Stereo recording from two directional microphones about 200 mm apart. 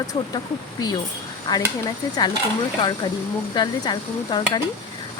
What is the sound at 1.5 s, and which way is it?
Speech, 20° left (ahead or behind).